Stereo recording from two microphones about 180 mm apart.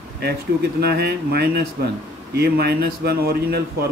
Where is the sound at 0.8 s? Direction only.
60° right (ahead or behind).